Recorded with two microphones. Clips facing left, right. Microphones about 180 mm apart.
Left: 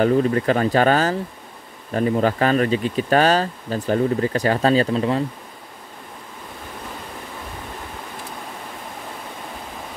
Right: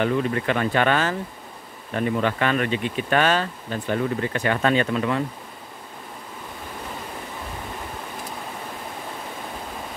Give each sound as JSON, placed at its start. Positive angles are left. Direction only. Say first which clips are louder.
{"t": 0.0, "sound": "speech", "louder": "left 5 dB", "side_deg": 40}